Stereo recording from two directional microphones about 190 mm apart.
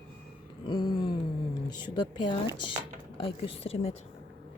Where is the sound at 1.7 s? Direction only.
25° left (ahead or behind).